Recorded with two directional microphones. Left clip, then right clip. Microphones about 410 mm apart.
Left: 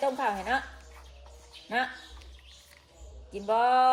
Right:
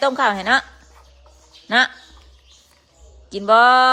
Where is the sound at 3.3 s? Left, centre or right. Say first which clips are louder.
Right 12 dB; right.